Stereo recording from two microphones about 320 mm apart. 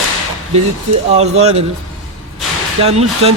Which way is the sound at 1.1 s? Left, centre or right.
Centre.